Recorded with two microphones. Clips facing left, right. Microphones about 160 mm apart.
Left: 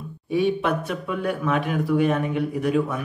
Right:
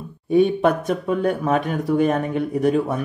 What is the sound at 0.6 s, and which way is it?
Speech, 40° right (ahead or behind).